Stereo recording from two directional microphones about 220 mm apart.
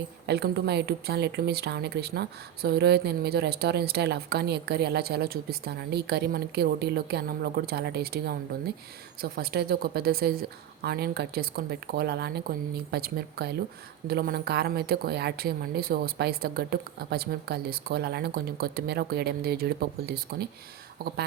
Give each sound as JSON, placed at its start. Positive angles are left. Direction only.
{"t": 0.3, "sound": "speech", "side_deg": -50}